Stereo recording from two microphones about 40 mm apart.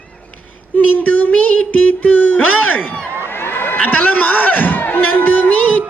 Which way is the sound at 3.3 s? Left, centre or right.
Left.